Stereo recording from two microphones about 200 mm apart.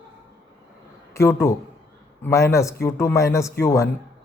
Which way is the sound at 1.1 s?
15° left (ahead or behind).